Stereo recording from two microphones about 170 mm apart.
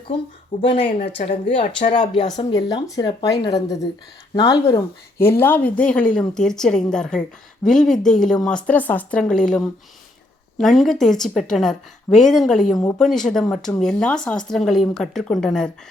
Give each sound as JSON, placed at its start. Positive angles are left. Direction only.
{"t": 0.5, "sound": "speech", "side_deg": 30}
{"t": 1.2, "sound": "speech", "side_deg": 55}
{"t": 1.9, "sound": "a woman's voice", "side_deg": 25}
{"t": 12.7, "sound": "speech", "side_deg": 20}
{"t": 13.0, "sound": "a woman's voice", "side_deg": 5}